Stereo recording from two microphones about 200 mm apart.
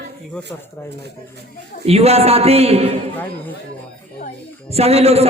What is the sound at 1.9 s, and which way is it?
A man's voice, 30° right (ahead or behind).